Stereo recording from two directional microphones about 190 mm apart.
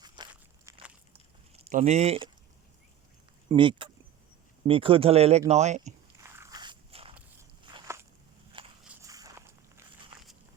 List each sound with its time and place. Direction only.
0.0 s walk: 20° right (ahead or behind)
1.6 s speech: 35° right (ahead or behind)
3.5 s speech: 25° right (ahead or behind)
6.2 s biting: 15° right (ahead or behind); by 7.2 s 30° right (ahead or behind)
8.5 s walk: 25° right (ahead or behind)